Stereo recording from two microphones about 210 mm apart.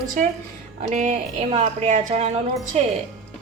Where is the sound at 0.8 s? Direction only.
35° right (ahead or behind).